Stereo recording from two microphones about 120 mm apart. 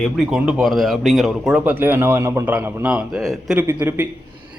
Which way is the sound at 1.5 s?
15° right (ahead or behind).